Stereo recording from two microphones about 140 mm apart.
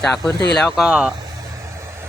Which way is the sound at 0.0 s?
5° left (ahead or behind).